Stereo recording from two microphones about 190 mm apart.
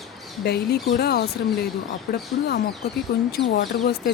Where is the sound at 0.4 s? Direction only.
55° left (ahead or behind).